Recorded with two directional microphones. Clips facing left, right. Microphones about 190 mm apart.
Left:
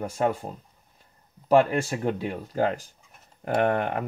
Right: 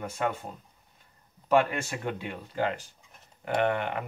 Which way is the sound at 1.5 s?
35° left (ahead or behind).